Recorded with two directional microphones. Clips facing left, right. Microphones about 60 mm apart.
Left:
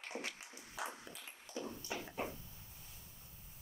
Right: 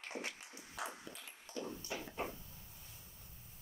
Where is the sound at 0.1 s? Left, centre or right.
Left.